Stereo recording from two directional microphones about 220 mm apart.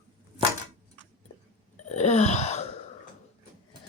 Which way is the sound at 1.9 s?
30° left (ahead or behind).